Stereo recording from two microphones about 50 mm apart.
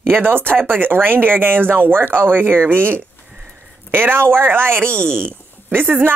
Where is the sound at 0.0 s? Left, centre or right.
Right.